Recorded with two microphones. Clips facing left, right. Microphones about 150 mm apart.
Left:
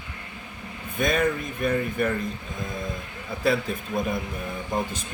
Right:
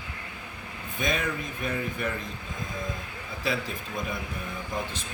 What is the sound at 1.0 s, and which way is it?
Speech, 50° left (ahead or behind).